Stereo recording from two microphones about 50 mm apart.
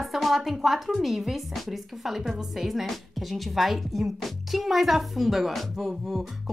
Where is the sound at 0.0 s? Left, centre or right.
Centre.